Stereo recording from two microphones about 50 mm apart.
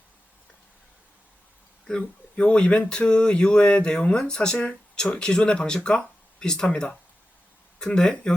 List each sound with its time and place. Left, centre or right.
1.9 s speech: centre
6.7 s speech: left
7.8 s speech: centre